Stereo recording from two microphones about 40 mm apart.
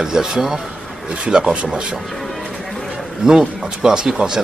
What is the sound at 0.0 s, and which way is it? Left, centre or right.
Speech, centre.